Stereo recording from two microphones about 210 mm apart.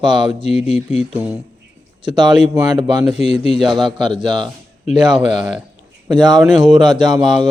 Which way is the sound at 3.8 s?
20° right (ahead or behind).